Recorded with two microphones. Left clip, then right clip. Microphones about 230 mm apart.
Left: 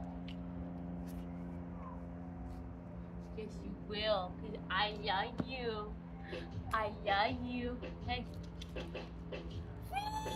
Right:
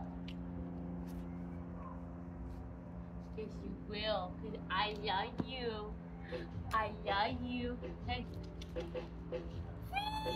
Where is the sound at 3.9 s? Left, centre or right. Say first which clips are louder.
Left 3 dB; left.